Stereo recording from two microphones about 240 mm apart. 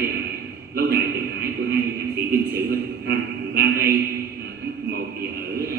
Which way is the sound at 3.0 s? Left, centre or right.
Right.